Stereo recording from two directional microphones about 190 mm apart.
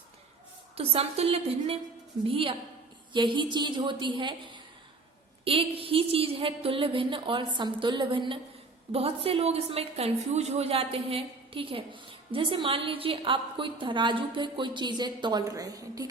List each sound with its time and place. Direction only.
0.8 s a woman's voice: 30° right (ahead or behind)